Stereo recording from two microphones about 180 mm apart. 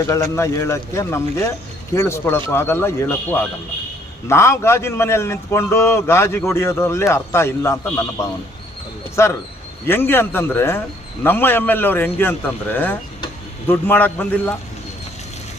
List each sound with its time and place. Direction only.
0.1 s a man's voice: 20° left (ahead or behind)